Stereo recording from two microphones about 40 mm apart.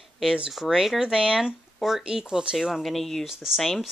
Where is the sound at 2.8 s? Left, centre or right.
Centre.